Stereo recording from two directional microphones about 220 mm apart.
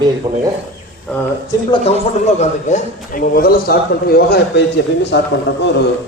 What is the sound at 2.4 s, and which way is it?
A man's voice, 35° left (ahead or behind).